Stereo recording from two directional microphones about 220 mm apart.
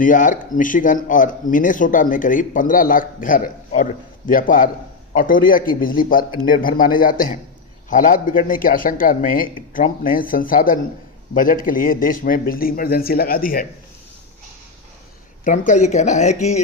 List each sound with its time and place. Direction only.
0.0 s speech: 35° left (ahead or behind)
15.4 s speech: 35° left (ahead or behind)